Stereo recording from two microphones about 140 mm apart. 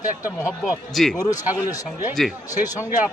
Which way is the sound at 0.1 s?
5° right (ahead or behind).